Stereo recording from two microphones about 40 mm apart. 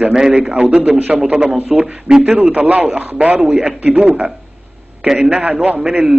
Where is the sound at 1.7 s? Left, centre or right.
Centre.